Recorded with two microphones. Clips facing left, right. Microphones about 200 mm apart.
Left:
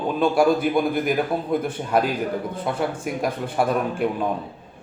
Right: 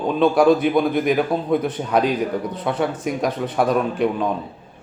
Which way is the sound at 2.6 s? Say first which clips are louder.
Right 4 dB; centre (ahead or behind).